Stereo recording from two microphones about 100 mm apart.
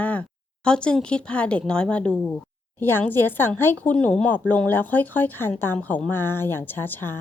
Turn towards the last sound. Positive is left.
turn(degrees=20)  # may be behind; listen again after turning